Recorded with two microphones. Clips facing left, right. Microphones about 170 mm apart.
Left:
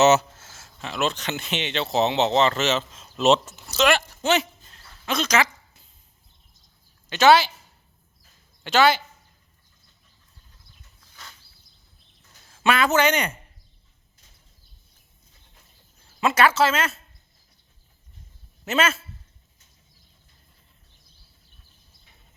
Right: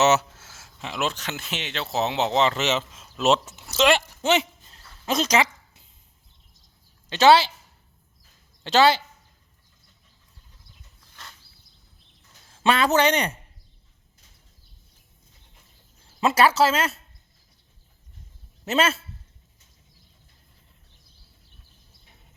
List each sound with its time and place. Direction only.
0.0 s speech: 5° right (ahead or behind)
3.5 s speech: 25° right (ahead or behind)
4.7 s a sound: 35° right (ahead or behind)
7.1 s speech: 30° right (ahead or behind)
8.6 s speech: 35° right (ahead or behind)
12.5 s speech: 30° right (ahead or behind)
16.2 s speech: 35° right (ahead or behind)
18.6 s speech: 35° right (ahead or behind)